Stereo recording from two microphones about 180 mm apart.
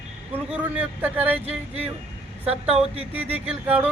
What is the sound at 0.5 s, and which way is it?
Speech, 10° right (ahead or behind).